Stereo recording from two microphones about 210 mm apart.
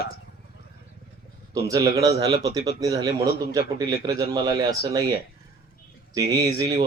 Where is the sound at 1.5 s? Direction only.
15° right (ahead or behind).